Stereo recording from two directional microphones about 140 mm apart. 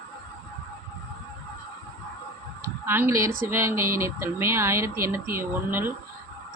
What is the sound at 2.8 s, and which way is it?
A woman's voice, 15° right (ahead or behind).